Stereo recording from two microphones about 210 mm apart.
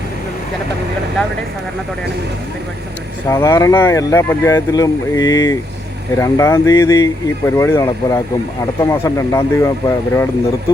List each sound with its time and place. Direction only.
3.2 s speech: 15° left (ahead or behind)